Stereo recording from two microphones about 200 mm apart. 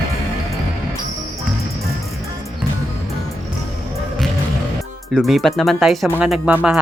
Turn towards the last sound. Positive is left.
turn(degrees=-5)  # may be behind; listen again after turning